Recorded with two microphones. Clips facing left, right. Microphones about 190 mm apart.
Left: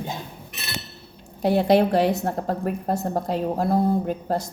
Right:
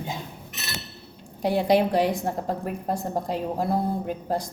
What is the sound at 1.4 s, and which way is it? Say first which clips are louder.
A woman's voice: left 3 dB; 15° right (ahead or behind).